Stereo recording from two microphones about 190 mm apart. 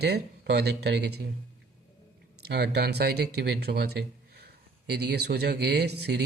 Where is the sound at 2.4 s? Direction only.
60° right (ahead or behind).